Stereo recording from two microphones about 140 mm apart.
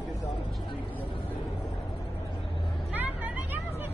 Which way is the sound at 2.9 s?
10° right (ahead or behind).